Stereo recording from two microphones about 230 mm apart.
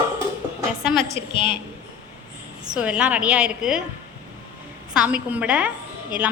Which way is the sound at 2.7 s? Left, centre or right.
Centre.